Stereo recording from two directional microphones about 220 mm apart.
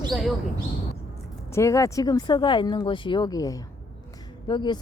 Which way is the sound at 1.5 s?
15° left (ahead or behind).